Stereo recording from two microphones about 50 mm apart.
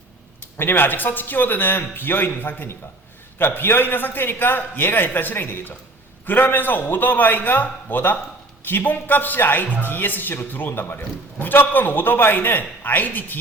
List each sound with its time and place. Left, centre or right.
0.6 s a man's voice: left